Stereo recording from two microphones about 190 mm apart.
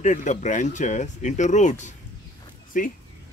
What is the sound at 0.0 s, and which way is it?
Speech, 40° left (ahead or behind).